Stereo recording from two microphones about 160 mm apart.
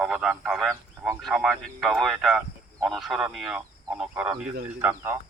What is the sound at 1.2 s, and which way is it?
Speech, centre (ahead or behind).